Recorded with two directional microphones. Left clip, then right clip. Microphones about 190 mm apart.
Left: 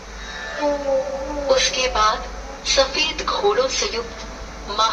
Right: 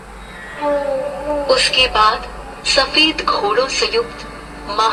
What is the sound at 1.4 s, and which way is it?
Speech, 45° right (ahead or behind).